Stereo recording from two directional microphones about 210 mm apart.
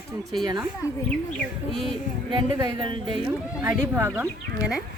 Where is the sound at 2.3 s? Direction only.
20° right (ahead or behind).